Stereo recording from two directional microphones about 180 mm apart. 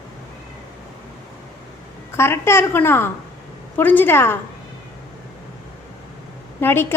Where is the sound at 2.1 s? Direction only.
15° left (ahead or behind).